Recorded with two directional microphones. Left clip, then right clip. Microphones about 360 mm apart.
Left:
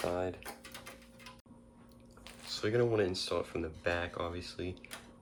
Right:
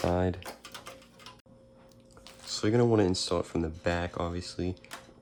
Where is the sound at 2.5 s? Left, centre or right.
Centre.